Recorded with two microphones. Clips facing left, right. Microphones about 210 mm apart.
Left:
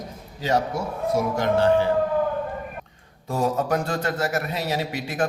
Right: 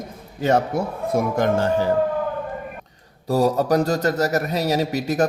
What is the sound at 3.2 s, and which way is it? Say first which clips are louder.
A man's voice: right 5 dB; 35° right (ahead or behind).